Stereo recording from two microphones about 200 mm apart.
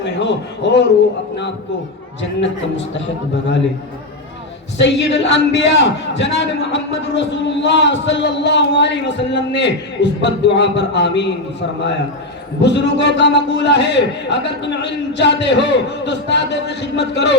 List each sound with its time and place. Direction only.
0.0 s a man's voice: 60° left (ahead or behind)
4.8 s a man's voice: 65° left (ahead or behind)
12.6 s a man's voice: 60° left (ahead or behind)